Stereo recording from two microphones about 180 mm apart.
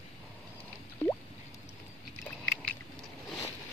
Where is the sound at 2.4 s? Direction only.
Centre (ahead or behind).